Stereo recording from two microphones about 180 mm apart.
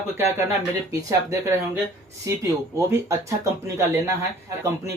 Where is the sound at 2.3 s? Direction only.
20° right (ahead or behind).